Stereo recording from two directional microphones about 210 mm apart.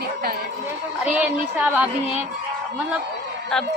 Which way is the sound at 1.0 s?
5° right (ahead or behind).